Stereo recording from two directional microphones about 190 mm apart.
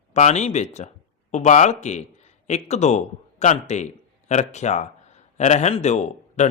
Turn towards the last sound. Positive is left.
turn(degrees=40)  # may be behind; listen again after turning